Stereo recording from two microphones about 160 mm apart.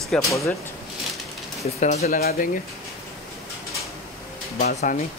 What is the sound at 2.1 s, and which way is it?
Speech, 70° left (ahead or behind).